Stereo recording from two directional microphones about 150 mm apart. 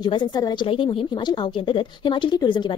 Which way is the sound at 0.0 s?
30° left (ahead or behind).